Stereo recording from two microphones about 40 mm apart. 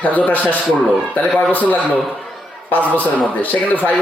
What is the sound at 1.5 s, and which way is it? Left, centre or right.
Speech, left.